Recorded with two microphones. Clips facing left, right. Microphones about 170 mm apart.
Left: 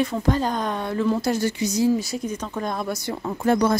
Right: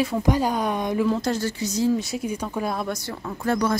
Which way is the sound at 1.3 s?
15° left (ahead or behind).